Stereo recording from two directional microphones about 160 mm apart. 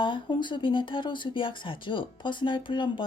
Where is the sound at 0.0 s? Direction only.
30° left (ahead or behind).